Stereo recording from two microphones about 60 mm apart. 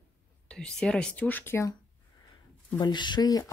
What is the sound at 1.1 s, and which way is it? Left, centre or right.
Speech, left.